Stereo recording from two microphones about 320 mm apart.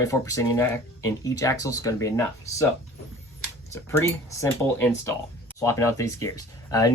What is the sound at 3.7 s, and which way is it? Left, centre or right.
Speech, centre.